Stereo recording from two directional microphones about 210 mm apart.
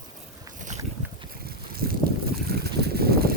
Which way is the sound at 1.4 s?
45° right (ahead or behind).